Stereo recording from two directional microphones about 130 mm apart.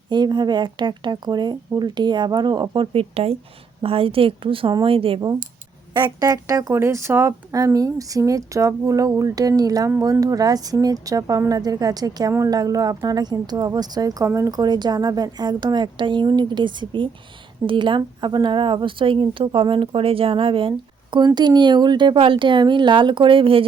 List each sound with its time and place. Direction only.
0.1 s a woman's voice: 35° right (ahead or behind)